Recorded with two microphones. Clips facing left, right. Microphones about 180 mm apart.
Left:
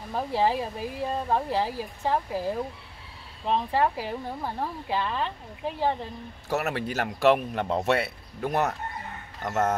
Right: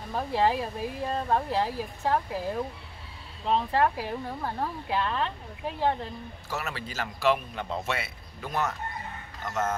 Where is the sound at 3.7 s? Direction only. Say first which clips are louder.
Even; 5° left (ahead or behind).